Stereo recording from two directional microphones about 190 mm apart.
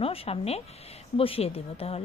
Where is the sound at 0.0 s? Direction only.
30° left (ahead or behind).